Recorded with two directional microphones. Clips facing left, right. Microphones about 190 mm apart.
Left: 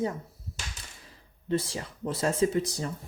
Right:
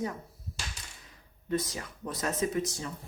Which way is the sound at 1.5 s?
30° left (ahead or behind).